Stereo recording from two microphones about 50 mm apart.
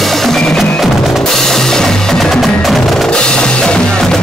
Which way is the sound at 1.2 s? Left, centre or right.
Centre.